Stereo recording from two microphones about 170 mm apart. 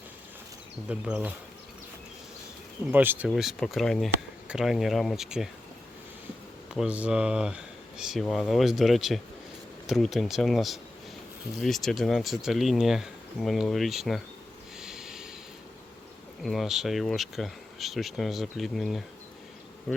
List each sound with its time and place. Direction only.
0.9 s speech: 5° right (ahead or behind)
2.9 s speech: 10° right (ahead or behind)
3.2 s speech: centre (ahead or behind)
6.7 s speech: 5° right (ahead or behind)
14.8 s snort: 5° right (ahead or behind)
16.4 s speech: centre (ahead or behind)